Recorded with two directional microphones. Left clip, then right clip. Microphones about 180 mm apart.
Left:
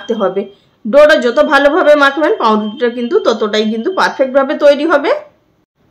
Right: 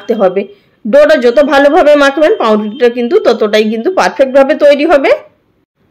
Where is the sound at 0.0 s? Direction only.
15° right (ahead or behind).